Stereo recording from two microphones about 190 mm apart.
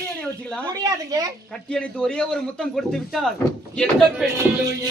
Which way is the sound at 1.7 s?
5° left (ahead or behind).